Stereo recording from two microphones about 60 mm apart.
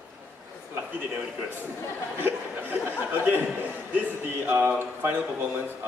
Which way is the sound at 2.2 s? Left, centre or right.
Right.